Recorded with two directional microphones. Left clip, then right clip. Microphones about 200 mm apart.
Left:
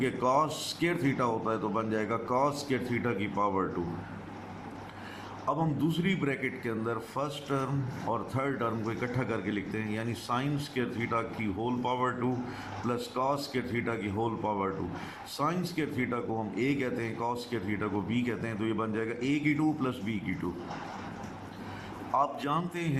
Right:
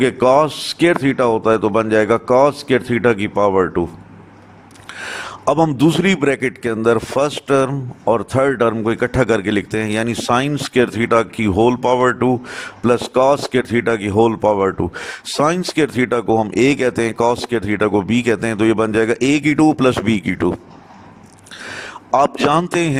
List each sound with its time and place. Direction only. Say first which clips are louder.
0.0 s a man's voice: right 15 dB; 50° right (ahead or behind)
5.5 s a man's voice: right 17 dB; 55° right (ahead or behind)
22.1 s a man's voice: right 15 dB; 50° right (ahead or behind)